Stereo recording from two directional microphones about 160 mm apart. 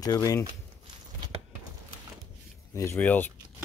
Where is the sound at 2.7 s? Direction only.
15° left (ahead or behind).